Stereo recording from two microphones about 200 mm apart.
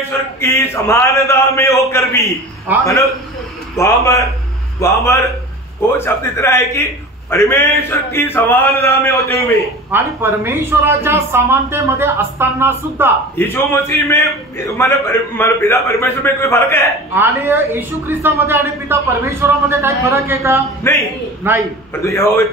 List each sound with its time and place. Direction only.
0.4 s a man's voice: 15° left (ahead or behind)
9.8 s speech: 10° right (ahead or behind)
13.4 s a man's voice: 10° left (ahead or behind)
17.1 s speech: 10° right (ahead or behind)
20.9 s a man's voice: 15° left (ahead or behind)
21.4 s speech: 10° right (ahead or behind)
22.0 s a man's voice: 15° left (ahead or behind)